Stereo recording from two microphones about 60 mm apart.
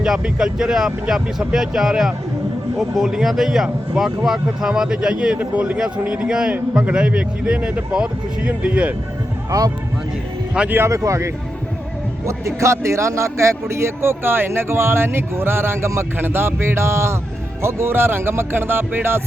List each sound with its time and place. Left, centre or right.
0.0 s a man's voice: centre
9.5 s speech: right
10.8 s a man's voice: right
17.6 s music: right